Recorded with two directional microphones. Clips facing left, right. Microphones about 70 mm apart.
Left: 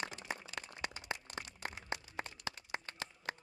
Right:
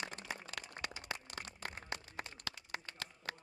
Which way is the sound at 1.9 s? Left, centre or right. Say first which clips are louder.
Left 3 dB; left.